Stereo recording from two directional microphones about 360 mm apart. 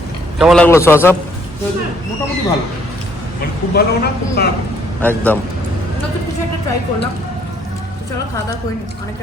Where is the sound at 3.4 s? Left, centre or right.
Left.